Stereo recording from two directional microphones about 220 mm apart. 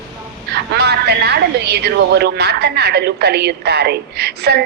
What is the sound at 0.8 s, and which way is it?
A woman's voice, 50° right (ahead or behind).